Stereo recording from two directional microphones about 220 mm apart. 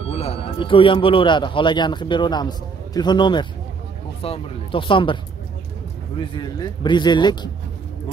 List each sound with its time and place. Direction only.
0.1 s a man's voice: 25° left (ahead or behind)
6.3 s speech: 20° left (ahead or behind)